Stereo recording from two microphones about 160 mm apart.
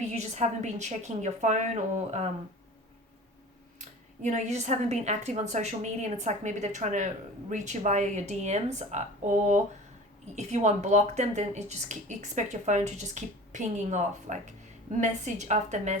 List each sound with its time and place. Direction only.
0.1 s speech: 45° right (ahead or behind)
3.8 s speech: 50° right (ahead or behind)